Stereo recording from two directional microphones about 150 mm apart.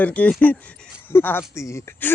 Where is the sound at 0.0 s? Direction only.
10° left (ahead or behind).